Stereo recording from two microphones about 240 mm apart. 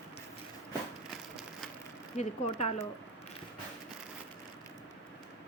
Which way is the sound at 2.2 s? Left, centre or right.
Left.